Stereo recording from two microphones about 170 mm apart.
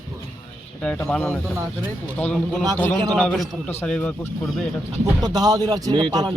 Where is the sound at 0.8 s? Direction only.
5° left (ahead or behind).